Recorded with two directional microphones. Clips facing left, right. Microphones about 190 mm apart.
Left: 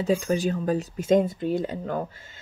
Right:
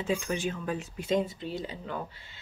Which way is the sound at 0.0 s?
40° left (ahead or behind).